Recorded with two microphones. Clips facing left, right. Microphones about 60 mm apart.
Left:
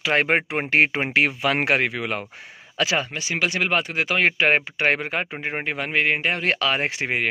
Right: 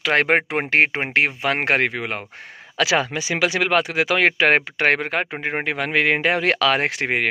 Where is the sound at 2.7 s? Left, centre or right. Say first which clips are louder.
Right 4 dB; right.